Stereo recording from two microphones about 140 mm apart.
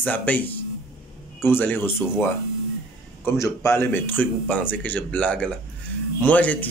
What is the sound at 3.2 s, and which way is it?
Speech, 20° left (ahead or behind).